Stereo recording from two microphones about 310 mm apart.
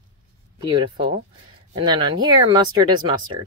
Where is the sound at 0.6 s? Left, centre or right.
Centre.